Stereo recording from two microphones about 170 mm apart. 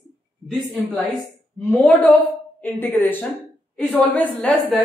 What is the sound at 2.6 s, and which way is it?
A man's voice, 10° left (ahead or behind).